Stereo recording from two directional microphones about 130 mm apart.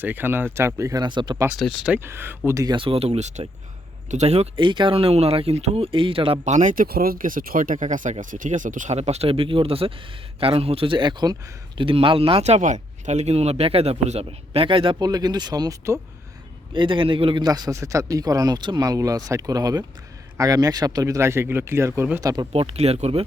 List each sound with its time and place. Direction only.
0.0 s speech: 15° right (ahead or behind); by 1.4 s 35° right (ahead or behind)
2.0 s speech: 20° right (ahead or behind)
2.6 s speech: 40° right (ahead or behind)
4.6 s speech: 40° right (ahead or behind)
6.4 s speech: 70° right (ahead or behind); by 14.9 s 45° right (ahead or behind)
14.9 s speech: 30° right (ahead or behind)
17.4 s speech: 30° right (ahead or behind)
22.2 s speech: 30° right (ahead or behind)
22.5 s speech: 50° right (ahead or behind)